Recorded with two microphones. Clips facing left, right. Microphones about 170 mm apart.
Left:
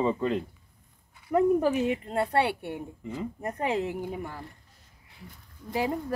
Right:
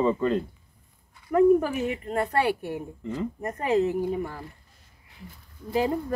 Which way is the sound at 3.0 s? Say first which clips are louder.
Right 3 dB; 5° left (ahead or behind).